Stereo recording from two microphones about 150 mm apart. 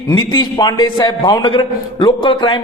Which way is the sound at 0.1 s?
30° left (ahead or behind).